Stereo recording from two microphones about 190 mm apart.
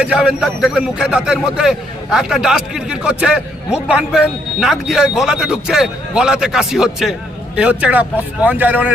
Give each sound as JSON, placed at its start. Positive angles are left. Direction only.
{"t": 0.0, "sound": "a man's voice", "side_deg": -5}